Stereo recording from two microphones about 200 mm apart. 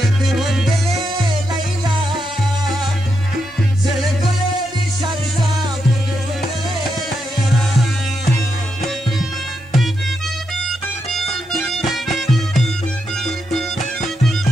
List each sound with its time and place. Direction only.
0.4 s music: centre (ahead or behind)
11.1 s music: centre (ahead or behind)